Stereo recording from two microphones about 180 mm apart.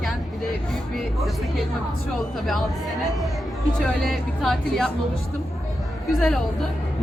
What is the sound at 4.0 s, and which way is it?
Speech, centre (ahead or behind).